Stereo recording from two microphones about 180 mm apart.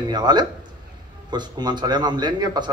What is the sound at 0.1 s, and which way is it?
A man's voice, 25° right (ahead or behind).